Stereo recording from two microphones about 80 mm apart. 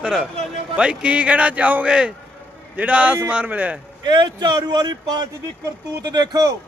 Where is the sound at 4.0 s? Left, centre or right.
Right.